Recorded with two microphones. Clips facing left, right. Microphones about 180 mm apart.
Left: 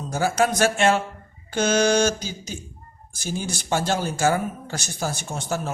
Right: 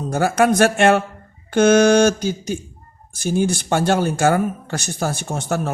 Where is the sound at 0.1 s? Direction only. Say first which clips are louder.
Right 5 dB; 60° right (ahead or behind).